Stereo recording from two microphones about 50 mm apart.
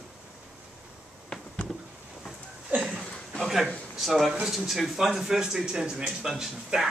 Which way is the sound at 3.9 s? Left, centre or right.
Centre.